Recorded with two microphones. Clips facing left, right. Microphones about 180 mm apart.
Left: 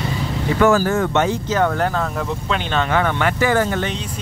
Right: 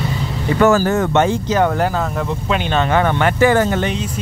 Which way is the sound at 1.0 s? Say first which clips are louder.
Right 3 dB; 30° right (ahead or behind).